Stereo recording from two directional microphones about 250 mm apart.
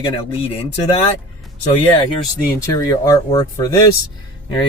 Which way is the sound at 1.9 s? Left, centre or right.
Left.